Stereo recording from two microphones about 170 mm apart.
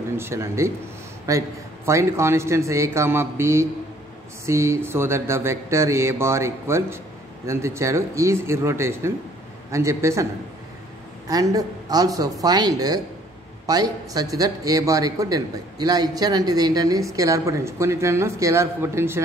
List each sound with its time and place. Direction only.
0.2 s speech: 15° right (ahead or behind)
11.2 s speech: 20° right (ahead or behind)